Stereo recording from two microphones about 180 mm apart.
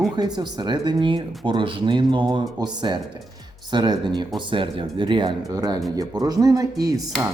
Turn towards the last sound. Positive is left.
turn(degrees=-20)  # may be behind; listen again after turning